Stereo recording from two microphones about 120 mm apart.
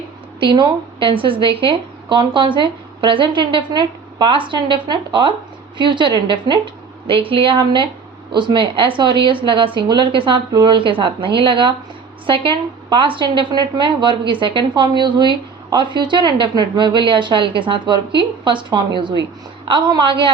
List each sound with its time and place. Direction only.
0.3 s a woman's voice: 40° right (ahead or behind)